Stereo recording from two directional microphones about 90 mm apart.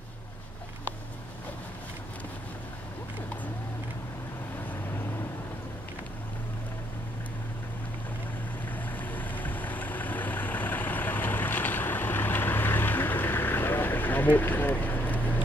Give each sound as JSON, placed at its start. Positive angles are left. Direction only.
{"t": 8.7, "sound": "vehicle", "side_deg": 20}